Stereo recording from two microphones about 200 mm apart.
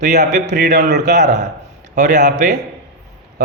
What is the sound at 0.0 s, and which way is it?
Speech, 55° right (ahead or behind).